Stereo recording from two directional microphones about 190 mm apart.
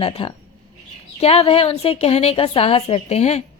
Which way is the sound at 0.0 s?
30° left (ahead or behind).